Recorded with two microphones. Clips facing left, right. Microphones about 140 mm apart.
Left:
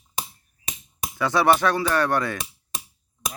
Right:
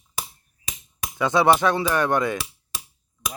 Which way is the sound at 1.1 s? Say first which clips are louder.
Right 1 dB; 20° right (ahead or behind).